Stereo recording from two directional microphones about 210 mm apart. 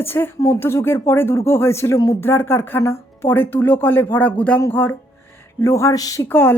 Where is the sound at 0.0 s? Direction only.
10° left (ahead or behind).